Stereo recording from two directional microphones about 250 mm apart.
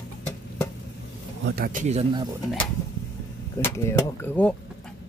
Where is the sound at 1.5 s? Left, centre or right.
Right.